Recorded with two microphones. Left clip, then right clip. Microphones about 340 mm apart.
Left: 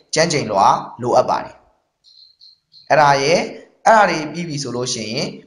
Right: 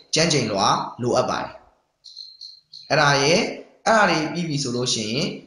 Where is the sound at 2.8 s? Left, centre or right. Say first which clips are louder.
Left 5 dB; centre.